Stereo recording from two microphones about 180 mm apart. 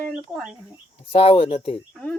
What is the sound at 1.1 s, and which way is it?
Speech, 35° left (ahead or behind).